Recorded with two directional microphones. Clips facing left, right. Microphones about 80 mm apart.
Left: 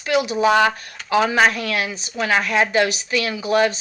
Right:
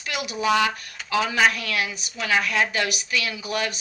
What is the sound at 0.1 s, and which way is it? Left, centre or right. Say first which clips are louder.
A woman's voice: left 7 dB; left.